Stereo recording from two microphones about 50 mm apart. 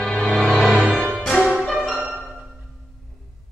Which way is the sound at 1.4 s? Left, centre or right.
Centre.